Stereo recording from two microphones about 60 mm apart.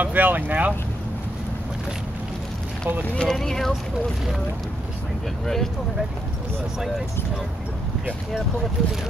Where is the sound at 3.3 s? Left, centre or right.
Centre.